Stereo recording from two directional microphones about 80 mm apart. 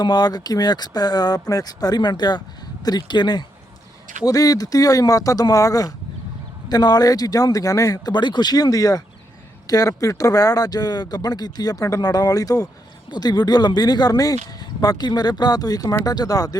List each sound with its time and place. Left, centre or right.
0.0 s speech: left
4.3 s speech: left
6.7 s speech: left